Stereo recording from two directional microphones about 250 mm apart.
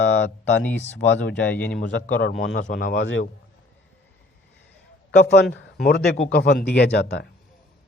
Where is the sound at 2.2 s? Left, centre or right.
Left.